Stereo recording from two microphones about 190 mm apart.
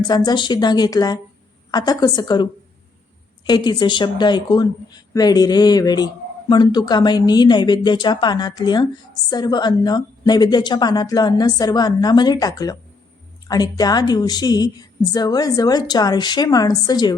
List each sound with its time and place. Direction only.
0.0 s a woman's voice: 20° left (ahead or behind)